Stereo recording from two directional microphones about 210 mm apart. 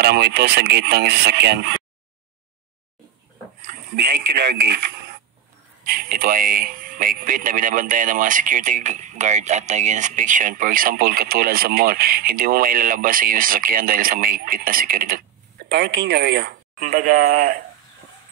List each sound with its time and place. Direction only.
0.0 s speech: 50° right (ahead or behind)
3.9 s speech: 50° right (ahead or behind)